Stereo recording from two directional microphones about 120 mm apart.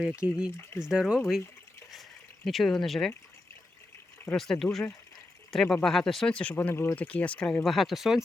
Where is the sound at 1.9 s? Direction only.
Centre (ahead or behind).